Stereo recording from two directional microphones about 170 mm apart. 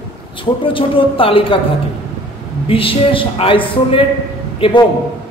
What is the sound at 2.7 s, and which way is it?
A man's voice, 30° left (ahead or behind).